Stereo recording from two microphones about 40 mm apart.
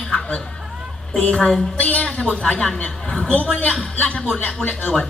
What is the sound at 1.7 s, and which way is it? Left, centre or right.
Speech, left.